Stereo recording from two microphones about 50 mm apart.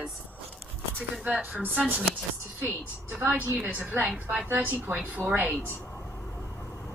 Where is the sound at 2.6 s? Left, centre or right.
Right.